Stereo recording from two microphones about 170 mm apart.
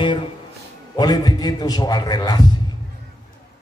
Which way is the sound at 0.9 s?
25° left (ahead or behind).